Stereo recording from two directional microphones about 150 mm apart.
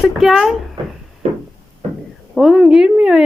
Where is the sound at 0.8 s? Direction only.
30° right (ahead or behind).